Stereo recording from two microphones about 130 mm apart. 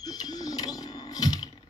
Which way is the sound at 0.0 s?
30° left (ahead or behind).